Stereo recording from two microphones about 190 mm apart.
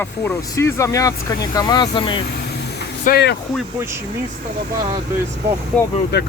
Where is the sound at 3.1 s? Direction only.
60° left (ahead or behind).